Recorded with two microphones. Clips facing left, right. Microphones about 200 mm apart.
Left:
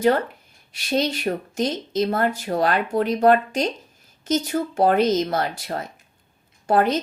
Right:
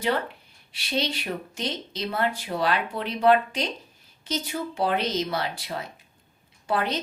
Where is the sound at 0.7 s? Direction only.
45° left (ahead or behind).